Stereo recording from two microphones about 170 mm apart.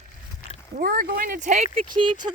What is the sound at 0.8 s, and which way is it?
Speech, 60° right (ahead or behind).